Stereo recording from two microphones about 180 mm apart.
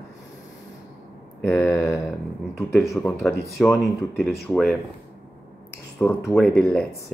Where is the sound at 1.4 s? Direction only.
5° left (ahead or behind).